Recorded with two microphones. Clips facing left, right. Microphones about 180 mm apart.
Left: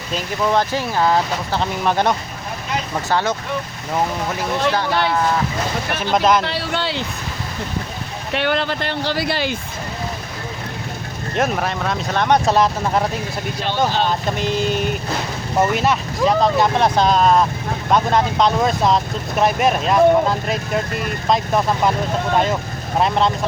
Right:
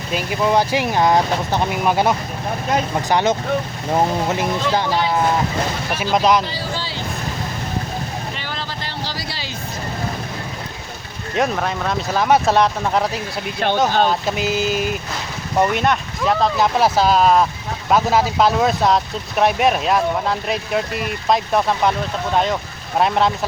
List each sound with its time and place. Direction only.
0.1 s speech: 10° right (ahead or behind)
3.1 s speech: 20° right (ahead or behind)
5.9 s speech: 5° right (ahead or behind)
6.4 s speech: 70° left (ahead or behind)
8.3 s speech: 65° left (ahead or behind)
11.3 s speech: 5° left (ahead or behind)
13.6 s speech: 55° right (ahead or behind)
14.3 s speech: 5° right (ahead or behind)
23.0 s speech: centre (ahead or behind)